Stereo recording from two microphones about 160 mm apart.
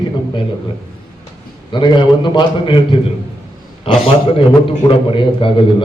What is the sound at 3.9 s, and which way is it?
A man's voice, 35° left (ahead or behind).